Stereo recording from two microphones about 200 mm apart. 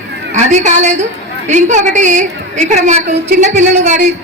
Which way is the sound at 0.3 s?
35° right (ahead or behind).